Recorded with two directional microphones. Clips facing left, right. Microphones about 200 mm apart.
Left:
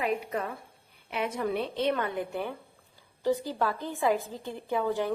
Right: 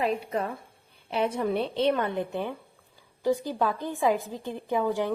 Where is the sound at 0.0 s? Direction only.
30° right (ahead or behind).